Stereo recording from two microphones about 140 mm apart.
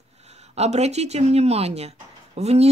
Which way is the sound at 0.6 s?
50° right (ahead or behind).